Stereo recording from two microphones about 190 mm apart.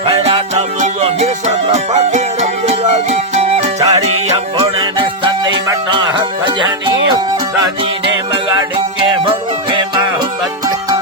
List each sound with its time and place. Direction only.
0.2 s music: 35° right (ahead or behind)
3.8 s music: 20° right (ahead or behind)
4.3 s music: 30° right (ahead or behind)
8.3 s music: 25° right (ahead or behind)